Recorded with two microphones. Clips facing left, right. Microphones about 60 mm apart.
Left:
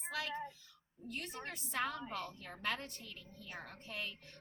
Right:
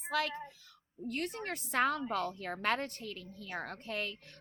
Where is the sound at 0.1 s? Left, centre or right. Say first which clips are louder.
Right 6 dB; right.